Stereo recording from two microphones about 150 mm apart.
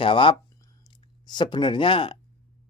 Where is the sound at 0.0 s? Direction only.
35° left (ahead or behind).